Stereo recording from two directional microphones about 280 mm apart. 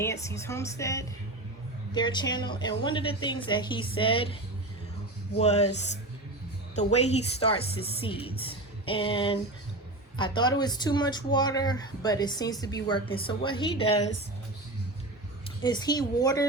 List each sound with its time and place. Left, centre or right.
0.0 s speech: centre
5.4 s speech: left
15.6 s speech: centre